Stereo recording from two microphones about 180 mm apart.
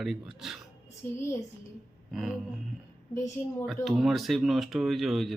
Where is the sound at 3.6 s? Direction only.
Centre (ahead or behind).